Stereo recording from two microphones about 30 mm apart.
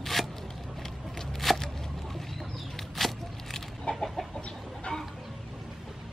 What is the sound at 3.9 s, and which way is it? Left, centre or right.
Chicken, left.